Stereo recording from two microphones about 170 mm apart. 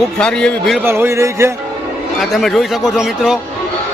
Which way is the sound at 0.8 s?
15° right (ahead or behind).